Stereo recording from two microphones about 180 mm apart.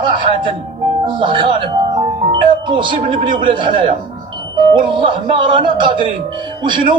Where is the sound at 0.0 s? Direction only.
25° right (ahead or behind).